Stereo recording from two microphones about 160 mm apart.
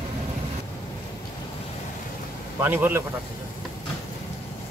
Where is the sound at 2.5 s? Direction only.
15° right (ahead or behind).